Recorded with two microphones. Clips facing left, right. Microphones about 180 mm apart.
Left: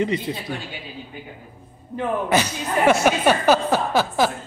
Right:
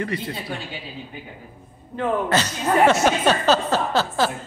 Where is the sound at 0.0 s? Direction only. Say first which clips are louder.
Left 4 dB; 20° left (ahead or behind).